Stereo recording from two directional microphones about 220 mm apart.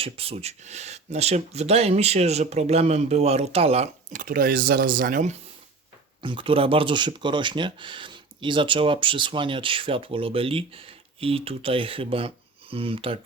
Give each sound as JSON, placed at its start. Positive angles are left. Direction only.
{"t": 0.0, "sound": "speech", "side_deg": -25}
{"t": 6.2, "sound": "speech", "side_deg": -25}